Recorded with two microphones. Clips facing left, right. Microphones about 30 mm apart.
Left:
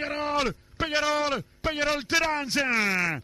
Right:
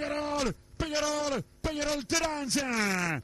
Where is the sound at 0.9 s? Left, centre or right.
Left.